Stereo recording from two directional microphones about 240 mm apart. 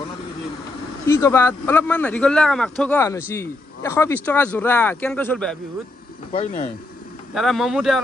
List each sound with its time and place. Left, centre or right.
1.0 s speech: centre
6.3 s speech: left
7.3 s speech: centre